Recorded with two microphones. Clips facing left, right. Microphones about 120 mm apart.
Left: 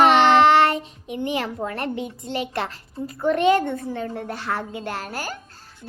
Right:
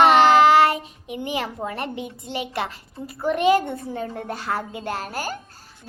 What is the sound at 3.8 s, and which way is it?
Speech, 35° right (ahead or behind).